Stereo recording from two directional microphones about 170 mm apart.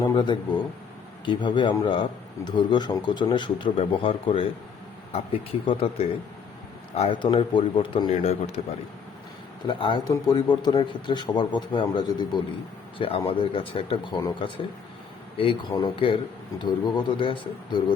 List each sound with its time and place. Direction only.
0.0 s a man's voice: 25° left (ahead or behind)
8.1 s speech: 40° left (ahead or behind)
9.6 s a man's voice: 30° left (ahead or behind)
15.7 s a man's voice: 30° left (ahead or behind)